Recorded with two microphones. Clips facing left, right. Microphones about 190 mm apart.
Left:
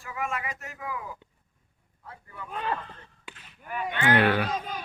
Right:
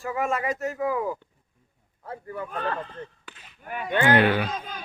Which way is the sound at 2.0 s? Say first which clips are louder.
Right 10 dB; 50° right (ahead or behind).